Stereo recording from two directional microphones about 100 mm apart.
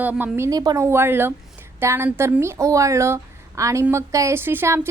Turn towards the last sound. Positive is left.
turn(degrees=-20)  # may be behind; listen again after turning